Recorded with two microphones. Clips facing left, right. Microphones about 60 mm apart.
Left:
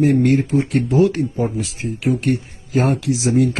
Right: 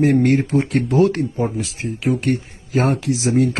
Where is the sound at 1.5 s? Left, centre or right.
Right.